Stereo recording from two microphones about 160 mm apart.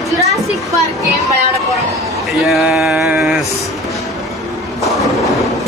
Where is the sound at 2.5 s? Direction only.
Centre (ahead or behind).